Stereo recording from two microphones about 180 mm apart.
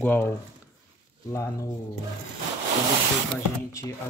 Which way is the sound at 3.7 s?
15° left (ahead or behind).